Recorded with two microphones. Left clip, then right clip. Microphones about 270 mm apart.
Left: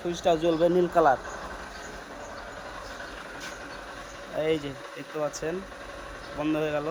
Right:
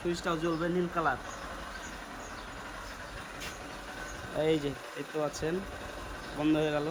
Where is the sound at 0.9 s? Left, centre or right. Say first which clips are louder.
Left 10 dB; left.